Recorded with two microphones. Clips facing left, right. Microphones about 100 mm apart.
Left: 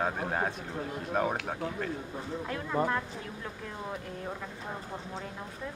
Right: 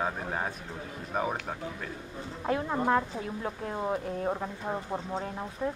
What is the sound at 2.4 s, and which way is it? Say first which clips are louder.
Speech: right 3 dB; 35° right (ahead or behind).